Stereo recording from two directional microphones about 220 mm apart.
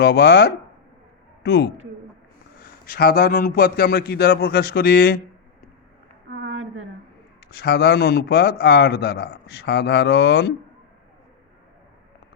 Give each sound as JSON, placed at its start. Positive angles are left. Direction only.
{"t": 0.0, "sound": "a man's voice", "side_deg": 45}
{"t": 2.8, "sound": "a man's voice", "side_deg": 45}
{"t": 6.3, "sound": "a sound", "side_deg": -55}
{"t": 7.4, "sound": "a man's voice", "side_deg": 45}